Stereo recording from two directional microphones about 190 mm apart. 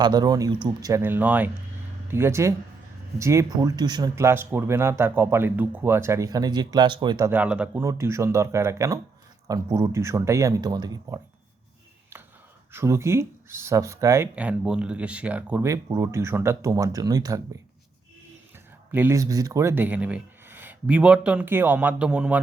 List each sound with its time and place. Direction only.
0.0 s speech: 20° right (ahead or behind)
7.3 s speech: 5° right (ahead or behind)
12.7 s speech: 15° right (ahead or behind)
18.9 s speech: 10° right (ahead or behind)